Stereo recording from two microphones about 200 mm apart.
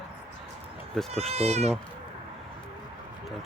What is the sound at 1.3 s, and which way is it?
Speech, 30° right (ahead or behind).